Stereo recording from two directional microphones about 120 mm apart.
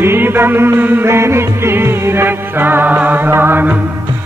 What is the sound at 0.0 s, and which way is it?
Music, 20° right (ahead or behind).